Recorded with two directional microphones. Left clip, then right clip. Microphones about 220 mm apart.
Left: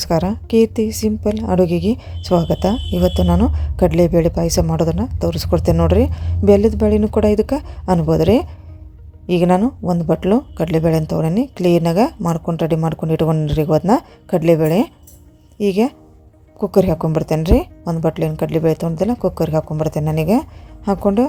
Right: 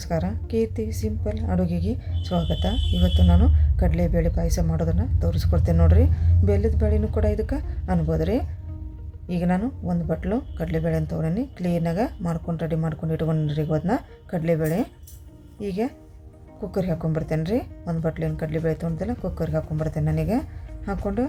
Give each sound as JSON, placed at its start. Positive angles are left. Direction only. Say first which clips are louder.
{"t": 0.0, "sound": "a woman's voice", "louder": "left 10 dB", "side_deg": 35}